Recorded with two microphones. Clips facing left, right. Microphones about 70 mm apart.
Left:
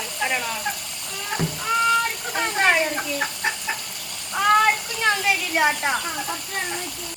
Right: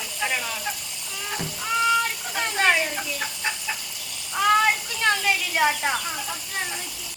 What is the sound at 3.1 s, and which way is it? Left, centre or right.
Speech, left.